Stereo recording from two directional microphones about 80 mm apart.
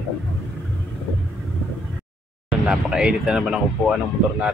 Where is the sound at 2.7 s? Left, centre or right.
Centre.